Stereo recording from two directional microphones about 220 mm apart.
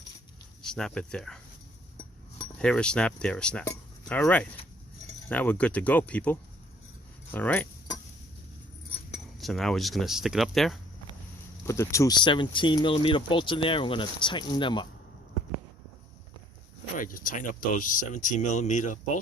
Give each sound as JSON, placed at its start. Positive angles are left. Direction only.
{"t": 0.7, "sound": "speech", "side_deg": 5}
{"t": 2.6, "sound": "speech", "side_deg": 5}
{"t": 3.7, "sound": "chink", "side_deg": 5}
{"t": 5.3, "sound": "speech", "side_deg": 5}
{"t": 7.3, "sound": "keys jangling", "side_deg": 10}
{"t": 9.4, "sound": "speech", "side_deg": 0}
{"t": 11.6, "sound": "speech", "side_deg": 15}
{"t": 17.0, "sound": "speech", "side_deg": 40}